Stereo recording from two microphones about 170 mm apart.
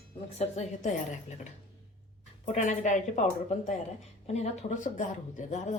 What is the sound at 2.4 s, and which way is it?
A woman's voice, 40° left (ahead or behind).